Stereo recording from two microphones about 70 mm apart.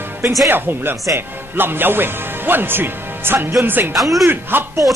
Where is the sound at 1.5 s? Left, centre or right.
Right.